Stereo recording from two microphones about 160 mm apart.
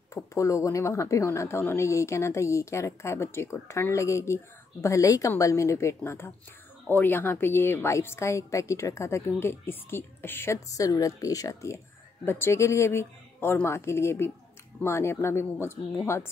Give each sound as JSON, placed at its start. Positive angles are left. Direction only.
{"t": 0.1, "sound": "a woman's voice", "side_deg": 20}